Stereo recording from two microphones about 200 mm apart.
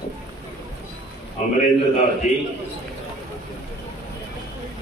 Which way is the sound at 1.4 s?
35° left (ahead or behind).